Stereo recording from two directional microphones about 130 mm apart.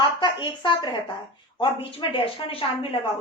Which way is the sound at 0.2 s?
40° left (ahead or behind).